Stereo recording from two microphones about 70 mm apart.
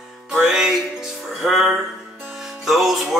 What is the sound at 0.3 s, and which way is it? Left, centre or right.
Music, centre.